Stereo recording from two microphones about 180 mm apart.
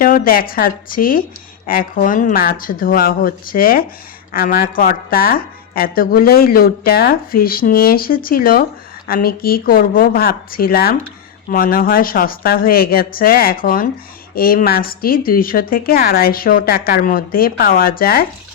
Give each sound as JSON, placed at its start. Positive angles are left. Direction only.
{"t": 0.0, "sound": "a woman's voice", "side_deg": 55}